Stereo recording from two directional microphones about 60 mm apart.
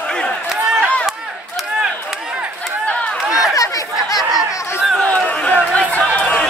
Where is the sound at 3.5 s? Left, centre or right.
Left.